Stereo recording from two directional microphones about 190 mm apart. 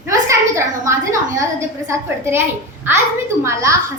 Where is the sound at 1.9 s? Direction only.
15° right (ahead or behind).